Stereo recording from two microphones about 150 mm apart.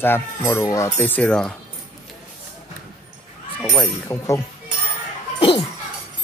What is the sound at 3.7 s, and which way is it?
Speech, 20° left (ahead or behind).